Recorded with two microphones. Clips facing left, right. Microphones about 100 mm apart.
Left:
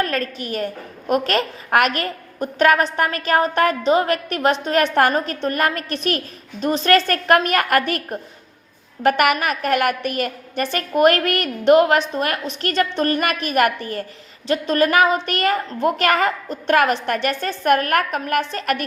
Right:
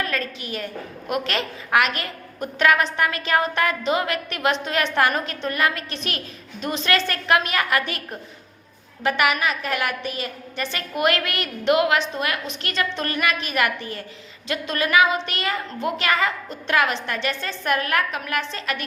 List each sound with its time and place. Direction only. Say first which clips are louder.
0.0 s a woman's voice: left 5 dB; 45° left (ahead or behind)